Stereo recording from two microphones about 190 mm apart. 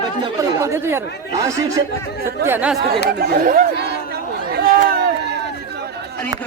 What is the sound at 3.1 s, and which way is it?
Chatter, 50° right (ahead or behind).